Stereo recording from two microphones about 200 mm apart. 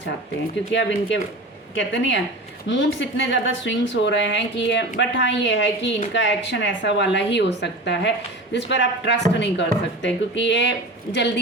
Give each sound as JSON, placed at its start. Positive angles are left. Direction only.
{"t": 0.7, "sound": "speech", "side_deg": 65}